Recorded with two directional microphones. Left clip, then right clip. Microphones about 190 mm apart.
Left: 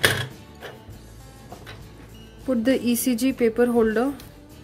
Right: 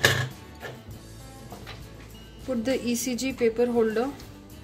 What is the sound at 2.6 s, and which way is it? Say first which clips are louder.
Speech: left 5 dB; 35° left (ahead or behind).